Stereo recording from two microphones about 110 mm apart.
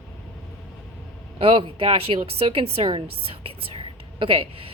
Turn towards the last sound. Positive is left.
turn(degrees=-55)  # may be behind; listen again after turning